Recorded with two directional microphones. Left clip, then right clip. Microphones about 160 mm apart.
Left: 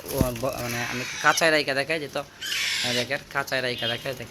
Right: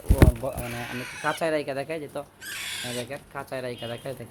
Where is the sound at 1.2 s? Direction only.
15° right (ahead or behind).